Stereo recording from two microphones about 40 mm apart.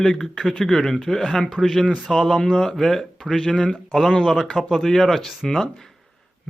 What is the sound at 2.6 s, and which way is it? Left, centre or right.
Speech, centre.